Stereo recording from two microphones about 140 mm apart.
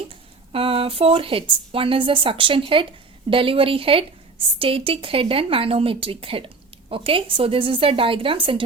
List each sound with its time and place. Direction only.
0.5 s speech: 40° right (ahead or behind)